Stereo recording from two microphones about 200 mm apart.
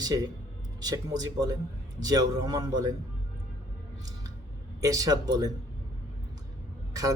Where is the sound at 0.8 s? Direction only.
20° right (ahead or behind).